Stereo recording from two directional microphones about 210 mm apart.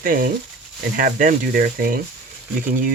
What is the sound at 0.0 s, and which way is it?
Speech, 40° right (ahead or behind).